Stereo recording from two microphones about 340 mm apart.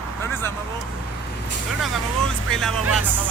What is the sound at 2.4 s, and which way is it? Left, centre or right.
Speech, centre.